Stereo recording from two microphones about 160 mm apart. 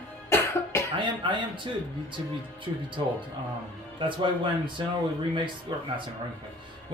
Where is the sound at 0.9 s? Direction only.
30° right (ahead or behind).